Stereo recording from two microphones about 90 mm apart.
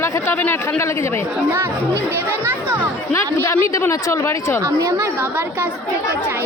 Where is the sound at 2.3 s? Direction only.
20° right (ahead or behind).